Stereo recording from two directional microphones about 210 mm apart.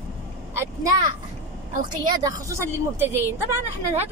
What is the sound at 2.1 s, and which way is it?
Speech, 15° right (ahead or behind).